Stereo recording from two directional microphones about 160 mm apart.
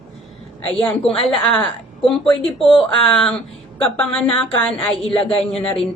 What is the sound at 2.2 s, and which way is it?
Speech, 35° left (ahead or behind).